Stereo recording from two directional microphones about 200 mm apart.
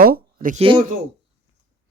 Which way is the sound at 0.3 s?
35° right (ahead or behind).